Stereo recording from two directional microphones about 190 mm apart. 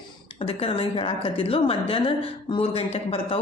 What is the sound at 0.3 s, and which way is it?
A woman's voice, 30° left (ahead or behind).